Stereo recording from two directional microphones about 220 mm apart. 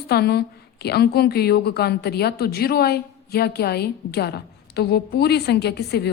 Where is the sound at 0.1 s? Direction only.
45° left (ahead or behind).